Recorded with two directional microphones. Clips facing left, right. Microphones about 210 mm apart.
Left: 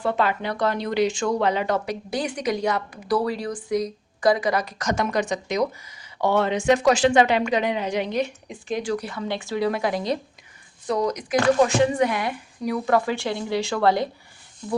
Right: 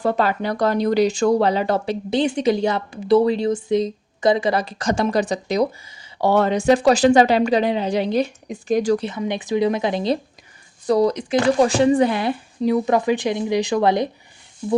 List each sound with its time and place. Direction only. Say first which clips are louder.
0.0 s speech: right 3 dB; 40° right (ahead or behind)
9.0 s speech: right 4 dB; 20° right (ahead or behind)